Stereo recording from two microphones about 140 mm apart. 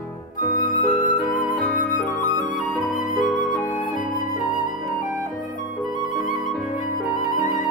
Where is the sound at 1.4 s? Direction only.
65° left (ahead or behind).